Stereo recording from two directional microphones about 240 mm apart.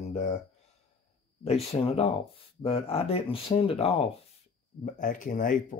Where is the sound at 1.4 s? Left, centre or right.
Left.